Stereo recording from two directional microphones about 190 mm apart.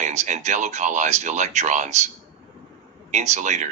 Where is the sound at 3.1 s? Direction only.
40° right (ahead or behind).